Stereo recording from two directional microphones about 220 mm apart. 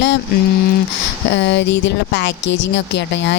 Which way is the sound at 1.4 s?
55° left (ahead or behind).